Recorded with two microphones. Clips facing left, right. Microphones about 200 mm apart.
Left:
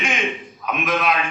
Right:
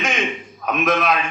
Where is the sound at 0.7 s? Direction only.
45° right (ahead or behind).